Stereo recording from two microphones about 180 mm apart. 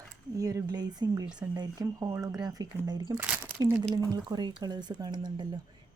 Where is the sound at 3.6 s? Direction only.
20° right (ahead or behind).